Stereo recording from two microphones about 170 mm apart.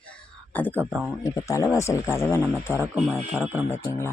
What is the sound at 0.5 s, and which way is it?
Speech, 10° left (ahead or behind).